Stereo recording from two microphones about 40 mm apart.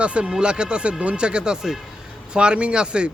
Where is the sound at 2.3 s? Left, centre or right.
Right.